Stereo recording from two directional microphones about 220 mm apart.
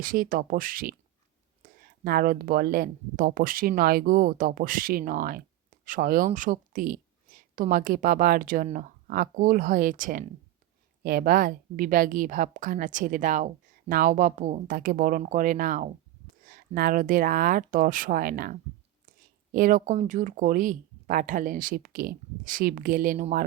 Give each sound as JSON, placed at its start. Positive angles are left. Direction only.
{"t": 0.0, "sound": "speech", "side_deg": -40}